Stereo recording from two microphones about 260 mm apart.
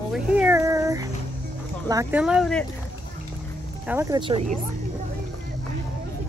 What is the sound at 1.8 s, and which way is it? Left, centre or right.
Speech, centre.